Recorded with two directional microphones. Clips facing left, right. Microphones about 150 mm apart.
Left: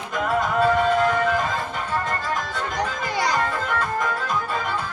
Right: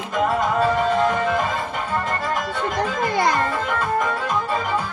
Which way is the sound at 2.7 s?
55° right (ahead or behind).